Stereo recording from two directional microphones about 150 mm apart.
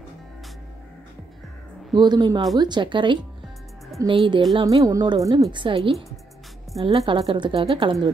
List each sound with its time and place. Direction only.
2.0 s a woman's voice: 30° right (ahead or behind)
4.6 s a woman's voice: 25° right (ahead or behind)
7.1 s a woman's voice: 35° right (ahead or behind)